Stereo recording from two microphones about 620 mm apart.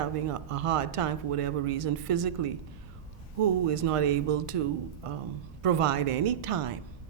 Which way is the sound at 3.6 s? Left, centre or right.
Right.